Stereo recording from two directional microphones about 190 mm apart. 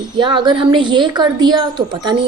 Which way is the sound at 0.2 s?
25° right (ahead or behind).